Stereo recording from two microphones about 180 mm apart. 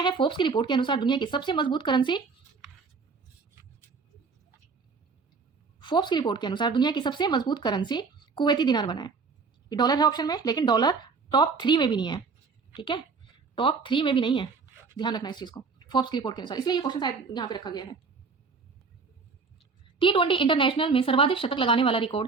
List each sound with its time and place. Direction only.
0.0 s speech: 25° left (ahead or behind)
5.8 s speech: 25° left (ahead or behind)
19.5 s speech: 30° left (ahead or behind)